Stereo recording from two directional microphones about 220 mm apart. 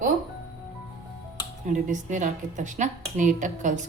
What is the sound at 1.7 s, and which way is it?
A woman's voice, 35° right (ahead or behind).